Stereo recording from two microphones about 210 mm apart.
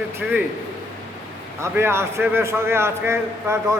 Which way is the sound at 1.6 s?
10° right (ahead or behind).